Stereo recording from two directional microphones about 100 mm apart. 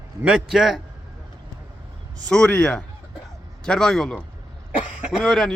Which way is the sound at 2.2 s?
10° left (ahead or behind).